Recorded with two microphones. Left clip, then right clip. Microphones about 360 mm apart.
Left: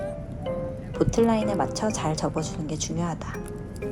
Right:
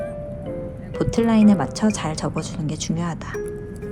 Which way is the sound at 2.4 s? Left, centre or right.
Centre.